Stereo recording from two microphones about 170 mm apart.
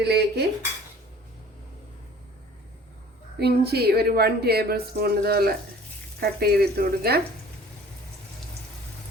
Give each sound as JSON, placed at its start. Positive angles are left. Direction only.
{"t": 0.0, "sound": "a woman's voice", "side_deg": -75}
{"t": 3.3, "sound": "a woman's voice", "side_deg": -70}